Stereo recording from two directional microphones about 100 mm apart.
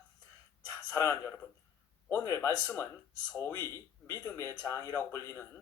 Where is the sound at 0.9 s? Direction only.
25° left (ahead or behind).